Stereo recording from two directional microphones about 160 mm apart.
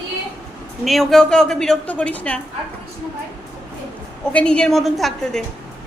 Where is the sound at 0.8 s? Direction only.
Centre (ahead or behind).